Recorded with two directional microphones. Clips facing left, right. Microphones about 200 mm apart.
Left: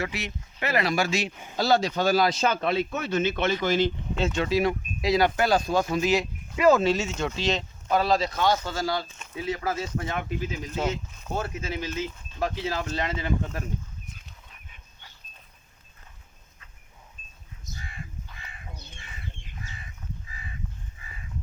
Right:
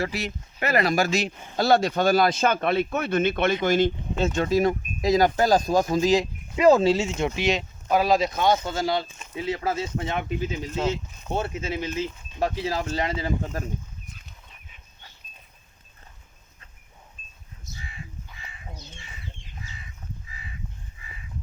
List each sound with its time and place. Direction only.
0.0 s speech: 35° right (ahead or behind)
1.5 s speech: 55° right (ahead or behind); by 7.3 s 30° right (ahead or behind)
7.3 s speech: 15° right (ahead or behind); by 13.7 s 35° right (ahead or behind)